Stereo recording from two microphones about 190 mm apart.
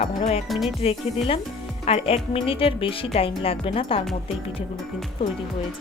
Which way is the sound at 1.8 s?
30° left (ahead or behind).